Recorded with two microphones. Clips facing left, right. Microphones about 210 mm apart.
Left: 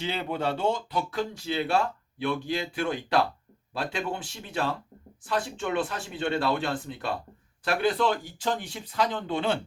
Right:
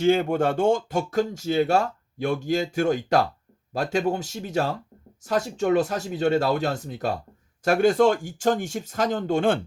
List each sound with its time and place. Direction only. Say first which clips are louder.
0.0 s speech: right 9 dB; 45° right (ahead or behind)